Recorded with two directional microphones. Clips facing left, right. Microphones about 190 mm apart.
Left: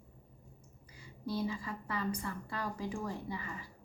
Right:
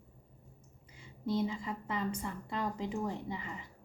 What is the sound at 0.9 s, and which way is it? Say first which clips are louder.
A woman's voice: right 4 dB; 20° right (ahead or behind).